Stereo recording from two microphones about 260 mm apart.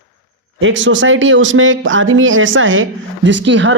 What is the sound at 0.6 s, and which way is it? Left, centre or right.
Speech, right.